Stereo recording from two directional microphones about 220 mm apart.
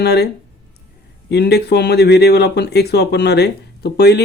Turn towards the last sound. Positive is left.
turn(degrees=45)  # may be behind; listen again after turning